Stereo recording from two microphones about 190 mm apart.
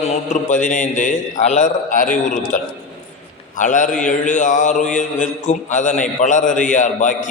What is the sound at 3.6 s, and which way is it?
A man's voice, 40° left (ahead or behind).